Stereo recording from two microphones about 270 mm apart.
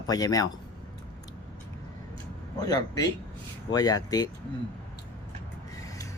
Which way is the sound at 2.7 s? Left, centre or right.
Centre.